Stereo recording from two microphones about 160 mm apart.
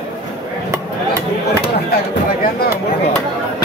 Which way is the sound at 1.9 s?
70° left (ahead or behind).